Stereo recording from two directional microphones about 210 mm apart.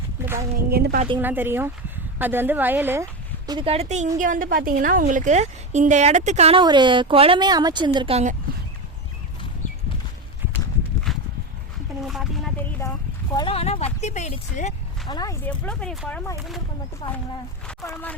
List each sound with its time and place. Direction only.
0.5 s a woman's voice: 50° right (ahead or behind)
1.2 s a woman's voice: 10° right (ahead or behind); by 8.4 s 30° right (ahead or behind)
12.0 s a sound: centre (ahead or behind)
13.3 s speech: 25° left (ahead or behind)
15.0 s speech: 20° left (ahead or behind)
15.4 s speech: 5° left (ahead or behind)
17.0 s speech: 25° left (ahead or behind)
17.7 s speech: 10° left (ahead or behind)